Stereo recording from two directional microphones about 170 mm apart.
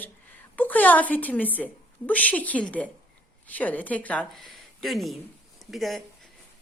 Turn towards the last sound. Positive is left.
turn(degrees=0)  # may be behind; listen again after turning